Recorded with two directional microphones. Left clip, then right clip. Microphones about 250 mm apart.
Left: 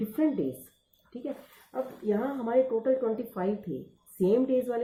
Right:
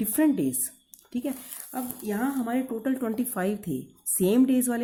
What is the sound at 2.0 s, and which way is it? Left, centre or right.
Speech, right.